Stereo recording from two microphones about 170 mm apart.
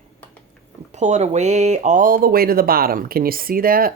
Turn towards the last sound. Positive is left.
turn(degrees=-60)  # may be behind; listen again after turning